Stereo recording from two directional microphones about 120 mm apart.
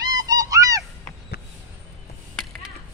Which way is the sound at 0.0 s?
30° right (ahead or behind).